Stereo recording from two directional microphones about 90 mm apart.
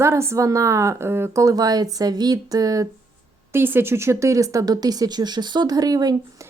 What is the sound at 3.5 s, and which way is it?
Speech, 25° right (ahead or behind).